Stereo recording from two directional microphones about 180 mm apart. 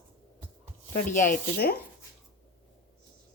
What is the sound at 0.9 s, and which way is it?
Speech, 45° left (ahead or behind).